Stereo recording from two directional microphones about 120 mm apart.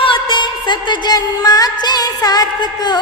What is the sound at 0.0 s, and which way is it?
Music, 45° left (ahead or behind).